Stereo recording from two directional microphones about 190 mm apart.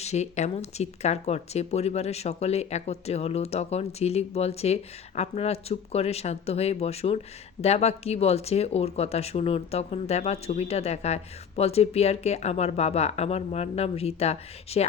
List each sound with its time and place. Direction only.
0.0 s speech: 35° left (ahead or behind)